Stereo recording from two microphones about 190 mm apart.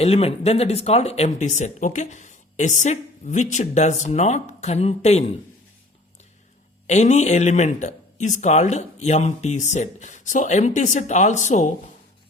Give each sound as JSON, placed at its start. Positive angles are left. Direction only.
{"t": 0.0, "sound": "speech", "side_deg": 30}
{"t": 6.8, "sound": "speech", "side_deg": 35}